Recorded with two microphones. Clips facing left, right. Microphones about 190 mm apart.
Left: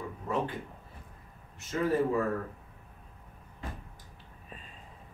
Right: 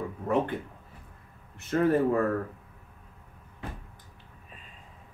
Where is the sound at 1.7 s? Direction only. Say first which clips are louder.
Right 6 dB; 60° right (ahead or behind).